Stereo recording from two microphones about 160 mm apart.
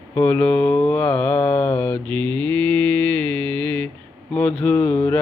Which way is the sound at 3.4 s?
30° right (ahead or behind).